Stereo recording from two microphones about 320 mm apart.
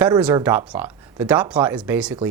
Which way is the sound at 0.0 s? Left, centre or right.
Centre.